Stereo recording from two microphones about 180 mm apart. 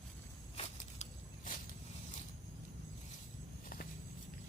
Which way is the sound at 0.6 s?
45° left (ahead or behind).